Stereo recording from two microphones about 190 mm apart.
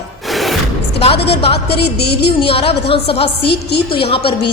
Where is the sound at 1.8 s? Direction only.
60° left (ahead or behind).